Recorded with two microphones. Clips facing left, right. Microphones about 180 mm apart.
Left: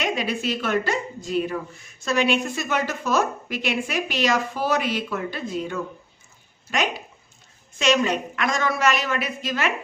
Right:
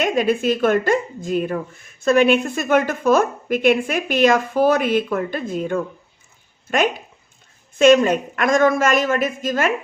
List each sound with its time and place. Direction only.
0.0 s a woman's voice: 50° right (ahead or behind)